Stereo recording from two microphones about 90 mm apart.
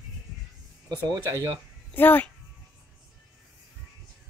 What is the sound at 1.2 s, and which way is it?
Speech, 35° right (ahead or behind).